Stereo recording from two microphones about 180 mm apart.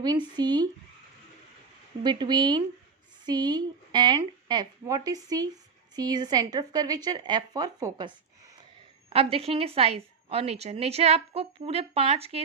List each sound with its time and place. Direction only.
0.0 s speech: 25° right (ahead or behind)
2.0 s speech: 25° right (ahead or behind)
9.0 s a woman's voice: 35° right (ahead or behind)